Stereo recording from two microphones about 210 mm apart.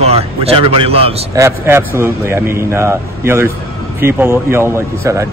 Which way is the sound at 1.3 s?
10° right (ahead or behind).